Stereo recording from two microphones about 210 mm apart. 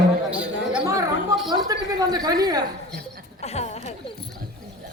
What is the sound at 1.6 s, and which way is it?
Speech, 20° right (ahead or behind).